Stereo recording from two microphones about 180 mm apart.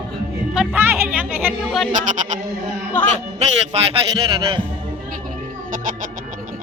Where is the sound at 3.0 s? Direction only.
10° left (ahead or behind).